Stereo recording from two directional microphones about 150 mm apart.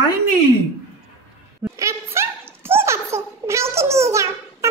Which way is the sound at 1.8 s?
20° right (ahead or behind).